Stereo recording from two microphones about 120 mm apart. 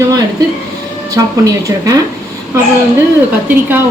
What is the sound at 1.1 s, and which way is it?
Speech, 30° right (ahead or behind).